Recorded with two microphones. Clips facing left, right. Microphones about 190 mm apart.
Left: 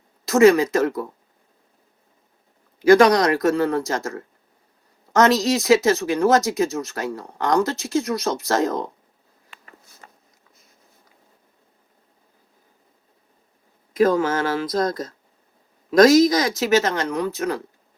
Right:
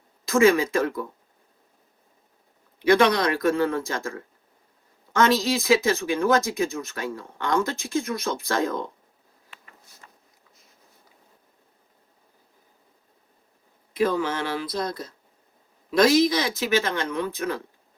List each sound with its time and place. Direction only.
0.3 s speech: 40° left (ahead or behind)
2.8 s speech: 45° left (ahead or behind)
13.9 s speech: 45° left (ahead or behind)